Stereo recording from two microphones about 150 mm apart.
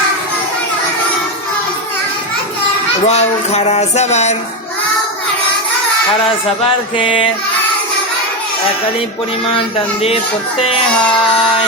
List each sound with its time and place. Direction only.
3.1 s a sound: 45° left (ahead or behind)
6.9 s music: 35° left (ahead or behind)
10.6 s music: 35° left (ahead or behind)